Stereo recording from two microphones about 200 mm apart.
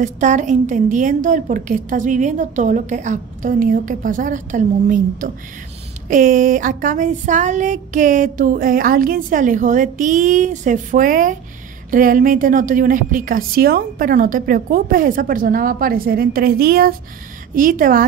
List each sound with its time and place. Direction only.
0.0 s a woman's voice: 35° right (ahead or behind)